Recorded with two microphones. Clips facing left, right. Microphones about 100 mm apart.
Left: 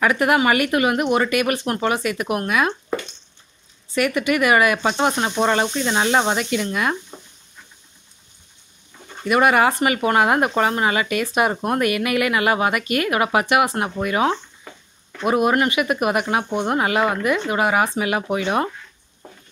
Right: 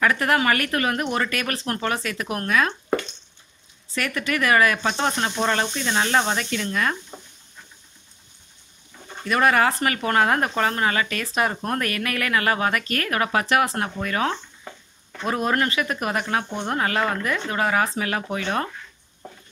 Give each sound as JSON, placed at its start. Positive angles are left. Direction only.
{"t": 0.0, "sound": "speech", "side_deg": 10}
{"t": 3.9, "sound": "speech", "side_deg": 10}
{"t": 9.2, "sound": "speech", "side_deg": 10}